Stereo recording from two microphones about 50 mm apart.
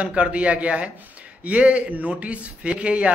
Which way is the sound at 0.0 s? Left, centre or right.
Right.